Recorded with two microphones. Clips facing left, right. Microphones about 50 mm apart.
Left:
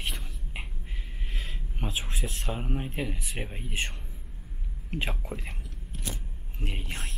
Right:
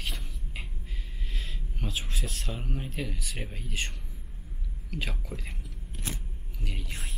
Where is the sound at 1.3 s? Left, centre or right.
Left.